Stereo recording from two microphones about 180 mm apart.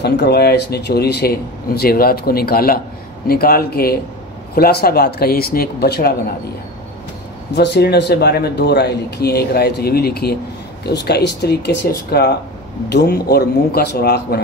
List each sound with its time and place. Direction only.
0.0 s speech: 65° left (ahead or behind)
7.5 s speech: 70° left (ahead or behind)